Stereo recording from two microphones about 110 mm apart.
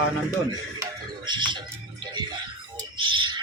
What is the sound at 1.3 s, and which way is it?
Music, 45° right (ahead or behind).